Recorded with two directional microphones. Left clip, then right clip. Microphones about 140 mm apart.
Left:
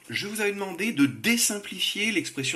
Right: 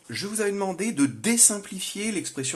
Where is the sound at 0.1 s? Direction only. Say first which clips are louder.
Even; 75° right (ahead or behind).